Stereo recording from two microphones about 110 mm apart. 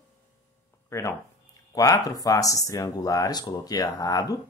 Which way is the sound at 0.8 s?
30° left (ahead or behind).